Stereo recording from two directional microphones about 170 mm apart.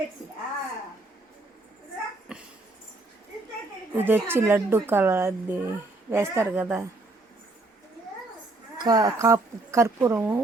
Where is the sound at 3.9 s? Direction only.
10° right (ahead or behind).